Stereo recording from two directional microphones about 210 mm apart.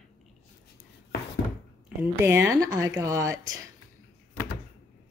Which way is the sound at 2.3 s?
15° right (ahead or behind).